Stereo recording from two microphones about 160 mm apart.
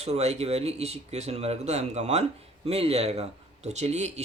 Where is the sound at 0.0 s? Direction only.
40° right (ahead or behind).